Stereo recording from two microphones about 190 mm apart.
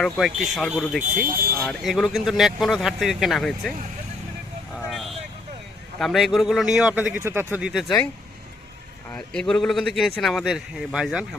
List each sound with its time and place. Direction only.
0.0 s a man's voice: centre (ahead or behind)
1.1 s speech: 45° right (ahead or behind)
1.5 s a man's voice: centre (ahead or behind)
4.7 s vehicle: centre (ahead or behind)
6.0 s a man's voice: centre (ahead or behind)
9.1 s a man's voice: 5° left (ahead or behind)